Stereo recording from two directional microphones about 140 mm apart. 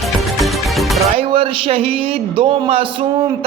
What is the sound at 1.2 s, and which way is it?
Speech, 45° right (ahead or behind).